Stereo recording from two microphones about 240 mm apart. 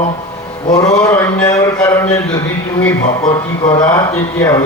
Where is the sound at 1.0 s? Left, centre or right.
Centre.